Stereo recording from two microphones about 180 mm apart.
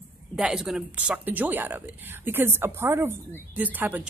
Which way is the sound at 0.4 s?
5° right (ahead or behind).